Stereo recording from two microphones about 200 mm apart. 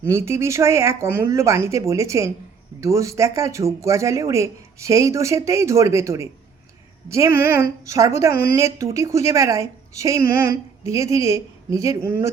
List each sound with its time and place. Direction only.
0.1 s a woman's voice: 15° right (ahead or behind)